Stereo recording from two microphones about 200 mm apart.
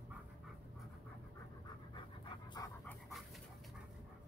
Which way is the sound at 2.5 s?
15° left (ahead or behind).